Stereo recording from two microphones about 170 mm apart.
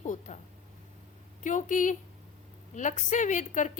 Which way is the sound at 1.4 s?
50° left (ahead or behind).